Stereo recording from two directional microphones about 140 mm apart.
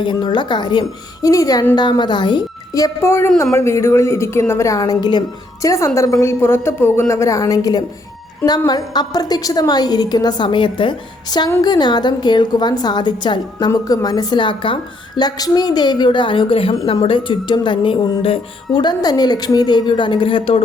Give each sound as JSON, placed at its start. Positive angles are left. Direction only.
{"t": 0.0, "sound": "a woman's voice", "side_deg": 35}